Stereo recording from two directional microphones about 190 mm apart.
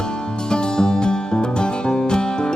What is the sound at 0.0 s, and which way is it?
Music, 5° left (ahead or behind).